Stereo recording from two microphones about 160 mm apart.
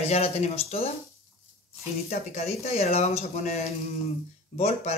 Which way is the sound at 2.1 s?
45° left (ahead or behind).